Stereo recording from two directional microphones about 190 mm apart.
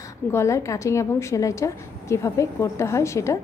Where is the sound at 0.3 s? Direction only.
15° left (ahead or behind).